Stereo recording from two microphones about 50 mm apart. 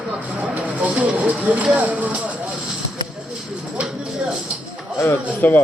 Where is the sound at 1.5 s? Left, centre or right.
Right.